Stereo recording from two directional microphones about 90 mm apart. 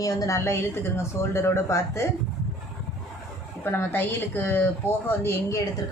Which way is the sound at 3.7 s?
25° left (ahead or behind).